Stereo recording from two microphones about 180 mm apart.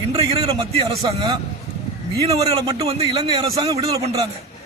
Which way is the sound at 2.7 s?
35° right (ahead or behind).